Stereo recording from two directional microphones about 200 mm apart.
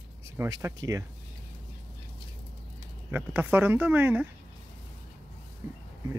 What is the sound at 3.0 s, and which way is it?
Speech, 10° right (ahead or behind).